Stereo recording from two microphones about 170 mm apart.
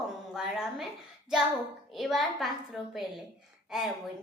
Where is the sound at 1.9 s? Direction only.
Centre (ahead or behind).